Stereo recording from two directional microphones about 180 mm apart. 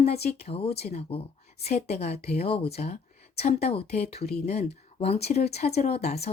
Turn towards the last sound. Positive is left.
turn(degrees=35)  # may be behind; listen again after turning